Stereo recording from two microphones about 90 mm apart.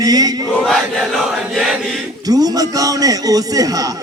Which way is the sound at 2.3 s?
45° right (ahead or behind).